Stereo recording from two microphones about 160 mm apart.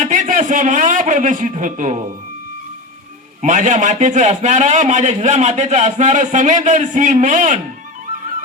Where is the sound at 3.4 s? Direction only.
50° right (ahead or behind).